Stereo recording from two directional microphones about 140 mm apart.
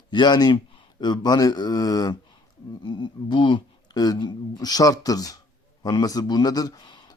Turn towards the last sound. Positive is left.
turn(degrees=30)  # may be behind; listen again after turning